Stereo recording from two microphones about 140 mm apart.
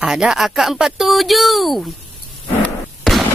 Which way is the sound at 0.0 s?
5° right (ahead or behind).